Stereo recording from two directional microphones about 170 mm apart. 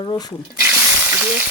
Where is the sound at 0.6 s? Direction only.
10° right (ahead or behind).